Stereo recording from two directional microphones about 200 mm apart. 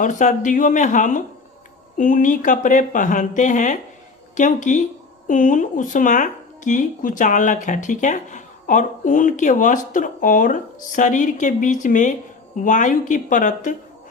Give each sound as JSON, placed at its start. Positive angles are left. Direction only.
{"t": 0.0, "sound": "a woman's voice", "side_deg": 40}